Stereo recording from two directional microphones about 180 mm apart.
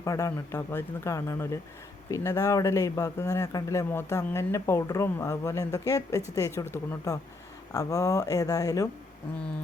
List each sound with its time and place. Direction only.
0.0 s a man's voice: 15° left (ahead or behind)